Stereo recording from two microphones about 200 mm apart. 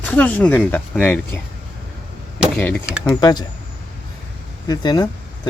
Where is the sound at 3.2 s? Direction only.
20° left (ahead or behind).